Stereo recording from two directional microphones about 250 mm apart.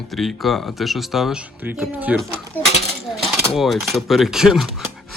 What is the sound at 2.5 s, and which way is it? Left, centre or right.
Speech, centre.